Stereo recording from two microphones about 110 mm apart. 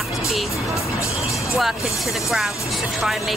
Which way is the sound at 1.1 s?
Centre (ahead or behind).